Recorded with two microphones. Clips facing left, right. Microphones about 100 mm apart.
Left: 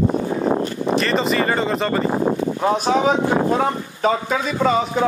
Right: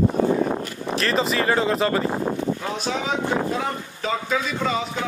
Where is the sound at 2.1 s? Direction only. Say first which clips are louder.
Left 4 dB; 50° left (ahead or behind).